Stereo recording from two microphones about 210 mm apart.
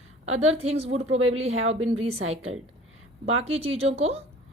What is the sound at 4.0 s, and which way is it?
Speech, 30° right (ahead or behind).